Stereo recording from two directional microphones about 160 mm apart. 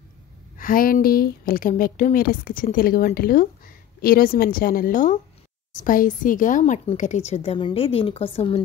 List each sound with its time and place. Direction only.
0.6 s a woman's voice: 60° left (ahead or behind); by 8.6 s 40° left (ahead or behind)